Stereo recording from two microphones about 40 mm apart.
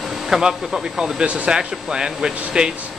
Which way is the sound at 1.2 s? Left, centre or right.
Right.